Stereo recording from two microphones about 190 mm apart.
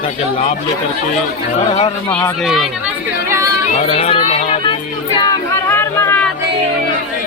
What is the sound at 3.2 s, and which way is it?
Chatter, 15° right (ahead or behind).